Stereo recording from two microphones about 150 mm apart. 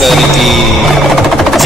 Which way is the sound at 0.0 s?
Centre (ahead or behind).